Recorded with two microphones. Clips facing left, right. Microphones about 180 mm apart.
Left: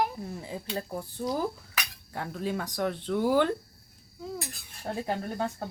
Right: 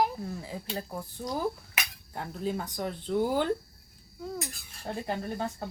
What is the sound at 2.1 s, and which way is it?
Speech, 75° left (ahead or behind).